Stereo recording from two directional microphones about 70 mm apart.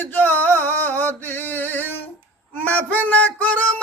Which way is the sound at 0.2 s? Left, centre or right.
Left.